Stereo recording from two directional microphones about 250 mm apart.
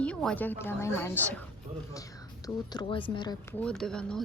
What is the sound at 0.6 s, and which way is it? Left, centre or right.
Speech, centre.